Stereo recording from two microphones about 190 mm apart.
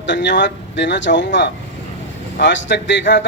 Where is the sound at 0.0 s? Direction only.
70° left (ahead or behind).